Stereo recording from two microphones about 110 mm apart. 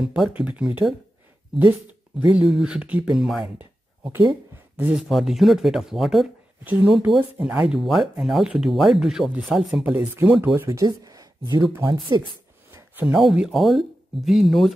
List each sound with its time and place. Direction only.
0.0 s speech: 5° right (ahead or behind)
3.5 s a sound: 15° right (ahead or behind)
4.7 s speech: 10° right (ahead or behind)
5.1 s speech: centre (ahead or behind)
6.6 s speech: 15° right (ahead or behind)
9.9 s speech: 15° right (ahead or behind)
10.7 s speech: 30° right (ahead or behind)
13.0 s speech: 5° right (ahead or behind)